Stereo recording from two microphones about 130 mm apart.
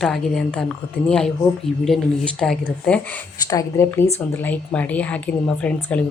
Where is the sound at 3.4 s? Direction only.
25° left (ahead or behind).